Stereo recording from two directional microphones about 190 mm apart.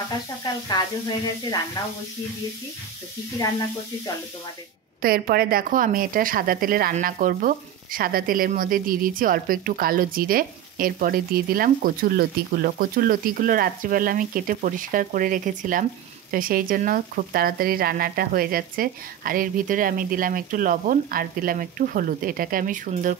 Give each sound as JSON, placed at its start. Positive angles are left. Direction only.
{"t": 1.8, "sound": "speech", "side_deg": 20}
{"t": 5.0, "sound": "a woman's voice", "side_deg": -50}